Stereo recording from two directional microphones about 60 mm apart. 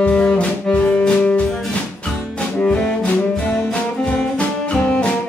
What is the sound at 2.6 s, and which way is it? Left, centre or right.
Music, centre.